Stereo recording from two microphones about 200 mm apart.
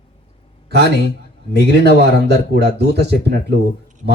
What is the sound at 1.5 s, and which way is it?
A man's voice, 55° right (ahead or behind).